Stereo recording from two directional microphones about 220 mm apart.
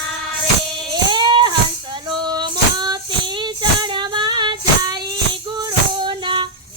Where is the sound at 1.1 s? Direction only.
20° right (ahead or behind).